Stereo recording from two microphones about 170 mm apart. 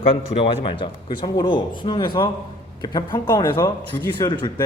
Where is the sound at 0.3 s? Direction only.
30° left (ahead or behind).